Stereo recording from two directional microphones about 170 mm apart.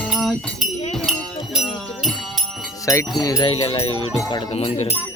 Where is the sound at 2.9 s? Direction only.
20° left (ahead or behind).